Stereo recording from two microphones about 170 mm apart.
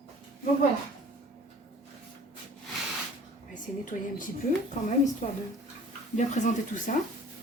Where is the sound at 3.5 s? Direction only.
50° left (ahead or behind).